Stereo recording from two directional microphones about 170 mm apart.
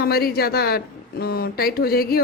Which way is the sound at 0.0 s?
65° left (ahead or behind).